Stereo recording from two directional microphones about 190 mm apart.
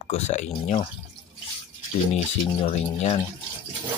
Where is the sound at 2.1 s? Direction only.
35° left (ahead or behind).